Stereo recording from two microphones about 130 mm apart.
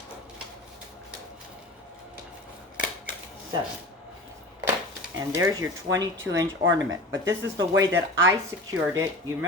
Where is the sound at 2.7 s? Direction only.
10° right (ahead or behind).